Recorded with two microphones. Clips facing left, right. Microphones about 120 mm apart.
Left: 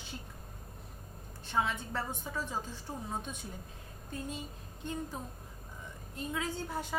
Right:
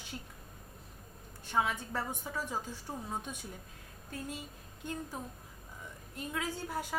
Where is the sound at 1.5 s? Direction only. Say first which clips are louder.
Right 1 dB; 10° right (ahead or behind).